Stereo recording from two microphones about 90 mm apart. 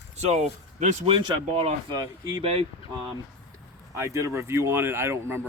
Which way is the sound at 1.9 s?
50° right (ahead or behind).